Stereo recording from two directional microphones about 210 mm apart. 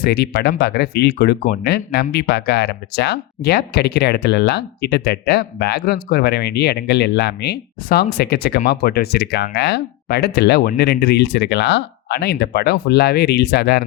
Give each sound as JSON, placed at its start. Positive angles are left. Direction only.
{"t": 0.0, "sound": "speech", "side_deg": 50}